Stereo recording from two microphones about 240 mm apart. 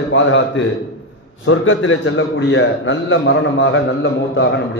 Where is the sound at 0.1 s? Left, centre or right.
Left.